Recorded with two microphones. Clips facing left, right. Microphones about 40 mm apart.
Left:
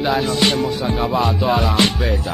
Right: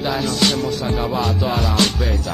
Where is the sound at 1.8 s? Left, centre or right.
Left.